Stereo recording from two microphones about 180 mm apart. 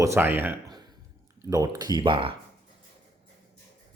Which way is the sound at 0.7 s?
25° right (ahead or behind).